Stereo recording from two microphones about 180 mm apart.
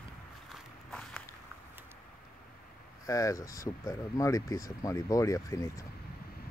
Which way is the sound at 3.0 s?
20° left (ahead or behind).